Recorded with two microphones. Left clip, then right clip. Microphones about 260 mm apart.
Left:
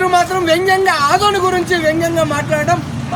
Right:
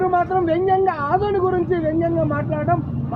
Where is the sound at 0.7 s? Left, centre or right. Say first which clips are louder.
Left 6 dB; left.